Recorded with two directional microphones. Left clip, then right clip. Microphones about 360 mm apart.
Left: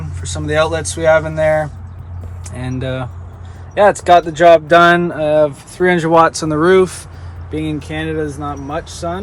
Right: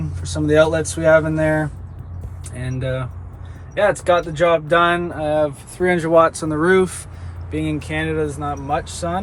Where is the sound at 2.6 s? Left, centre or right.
Left.